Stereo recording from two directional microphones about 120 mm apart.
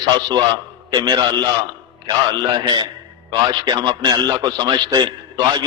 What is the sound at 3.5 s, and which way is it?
A man's voice, 35° right (ahead or behind).